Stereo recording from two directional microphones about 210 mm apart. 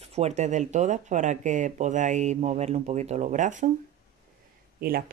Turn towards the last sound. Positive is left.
turn(degrees=-45)  # may be behind; listen again after turning